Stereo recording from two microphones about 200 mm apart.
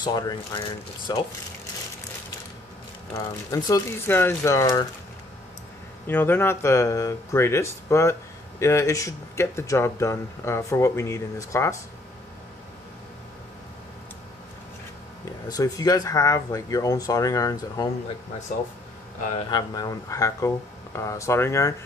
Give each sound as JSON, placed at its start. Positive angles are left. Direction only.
{"t": 0.0, "sound": "speech", "side_deg": 20}
{"t": 3.2, "sound": "speech", "side_deg": 15}
{"t": 6.0, "sound": "speech", "side_deg": 10}
{"t": 15.4, "sound": "speech", "side_deg": 20}
{"t": 19.5, "sound": "speech", "side_deg": 20}